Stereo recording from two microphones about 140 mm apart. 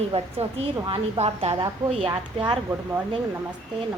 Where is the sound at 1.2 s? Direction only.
45° right (ahead or behind).